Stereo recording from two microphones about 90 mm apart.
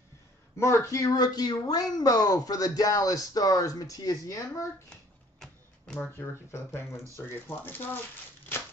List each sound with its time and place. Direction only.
0.6 s speech: 30° left (ahead or behind)
5.4 s a sound: 5° left (ahead or behind)
6.1 s speech: 25° left (ahead or behind)